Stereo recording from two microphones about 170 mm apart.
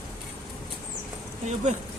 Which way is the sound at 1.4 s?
45° right (ahead or behind).